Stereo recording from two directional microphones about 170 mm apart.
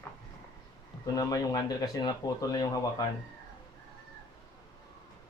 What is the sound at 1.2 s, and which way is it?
Speech, 20° left (ahead or behind).